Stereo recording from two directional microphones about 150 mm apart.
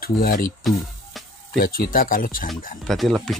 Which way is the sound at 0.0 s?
80° left.